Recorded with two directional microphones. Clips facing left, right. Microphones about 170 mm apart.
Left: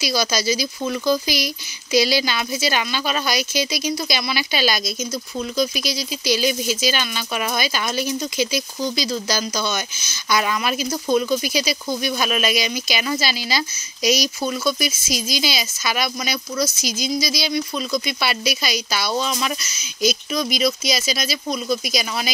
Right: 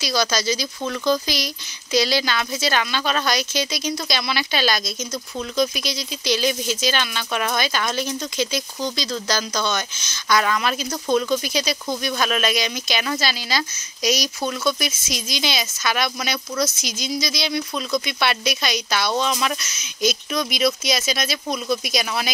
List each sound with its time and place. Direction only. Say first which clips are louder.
0.0 s speech: left 1 dB; 10° left (ahead or behind)